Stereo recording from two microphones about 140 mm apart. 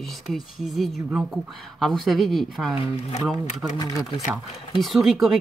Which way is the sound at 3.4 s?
55° left (ahead or behind).